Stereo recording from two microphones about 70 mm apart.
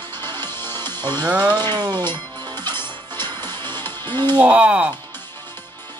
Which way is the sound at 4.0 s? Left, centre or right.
Right.